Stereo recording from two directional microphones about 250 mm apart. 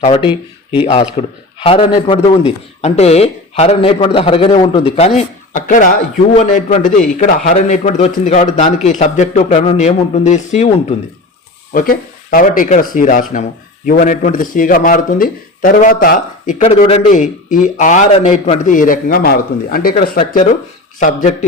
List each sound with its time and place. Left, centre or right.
0.0 s a man's voice: left